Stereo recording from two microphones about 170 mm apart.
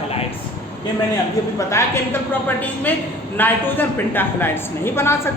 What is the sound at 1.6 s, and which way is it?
A woman's voice, 15° left (ahead or behind).